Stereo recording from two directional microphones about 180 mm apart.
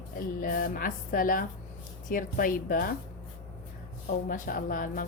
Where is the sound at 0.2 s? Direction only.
55° left (ahead or behind).